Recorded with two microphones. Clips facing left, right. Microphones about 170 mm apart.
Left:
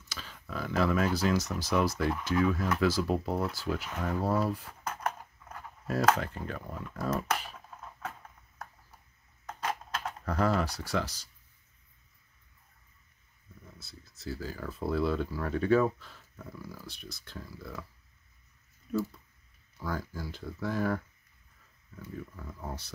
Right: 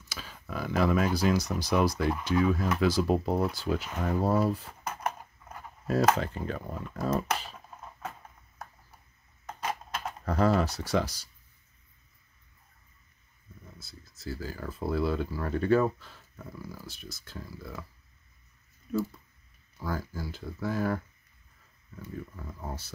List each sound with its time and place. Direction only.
0.1 s speech: 10° right (ahead or behind); by 4.7 s 25° right (ahead or behind)
4.8 s a sound: 10° right (ahead or behind)
5.9 s speech: 25° right (ahead or behind)
9.5 s a sound: 10° right (ahead or behind)
10.2 s speech: 25° right (ahead or behind)
13.7 s speech: centre (ahead or behind)
18.9 s speech: centre (ahead or behind)
22.0 s speech: 10° right (ahead or behind)